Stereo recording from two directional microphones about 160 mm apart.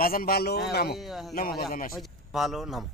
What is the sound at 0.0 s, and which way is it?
Speech, 65° left (ahead or behind).